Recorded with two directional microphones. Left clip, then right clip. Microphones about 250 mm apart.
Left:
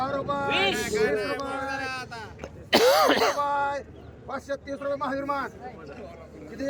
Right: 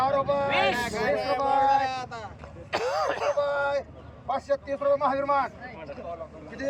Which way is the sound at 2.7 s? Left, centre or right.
Left.